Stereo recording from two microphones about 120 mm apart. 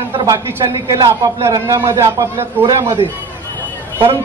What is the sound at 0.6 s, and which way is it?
A man's voice, 35° right (ahead or behind).